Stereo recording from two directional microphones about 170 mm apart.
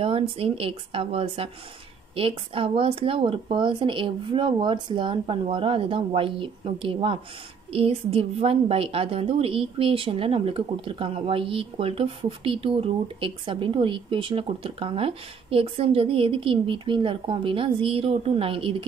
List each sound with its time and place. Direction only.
0.0 s a woman's voice: 35° right (ahead or behind)